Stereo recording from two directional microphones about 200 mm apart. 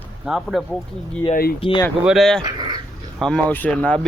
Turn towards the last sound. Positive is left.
turn(degrees=5)  # may be behind; listen again after turning